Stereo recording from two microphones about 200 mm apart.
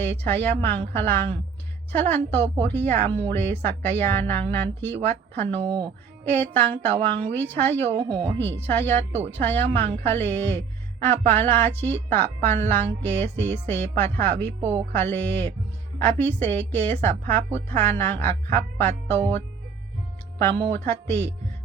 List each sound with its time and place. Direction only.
0.0 s a woman's voice: 10° left (ahead or behind)
5.5 s speech: 25° right (ahead or behind)
6.2 s a woman's voice: 10° left (ahead or behind)
7.9 s speech: 25° right (ahead or behind)
8.4 s a woman's voice: 10° left (ahead or behind)
14.6 s speech: 10° right (ahead or behind)
14.9 s a woman's voice: 10° left (ahead or behind)
20.7 s a woman's voice: 10° left (ahead or behind)